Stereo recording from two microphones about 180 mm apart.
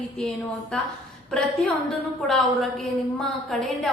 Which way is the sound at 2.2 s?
Centre (ahead or behind).